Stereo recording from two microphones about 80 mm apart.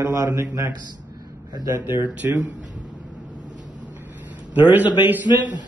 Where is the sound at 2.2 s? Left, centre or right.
Right.